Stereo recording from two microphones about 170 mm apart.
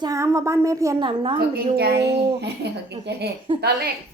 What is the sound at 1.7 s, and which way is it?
A child's voice, 70° right (ahead or behind).